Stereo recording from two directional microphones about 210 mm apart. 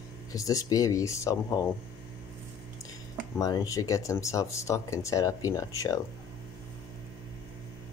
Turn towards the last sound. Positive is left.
turn(degrees=15)  # may be behind; listen again after turning